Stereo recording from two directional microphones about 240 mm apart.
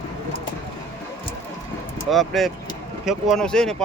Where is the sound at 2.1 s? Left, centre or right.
Centre.